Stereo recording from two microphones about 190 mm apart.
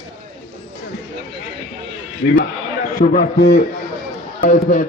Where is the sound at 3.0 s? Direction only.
55° left (ahead or behind).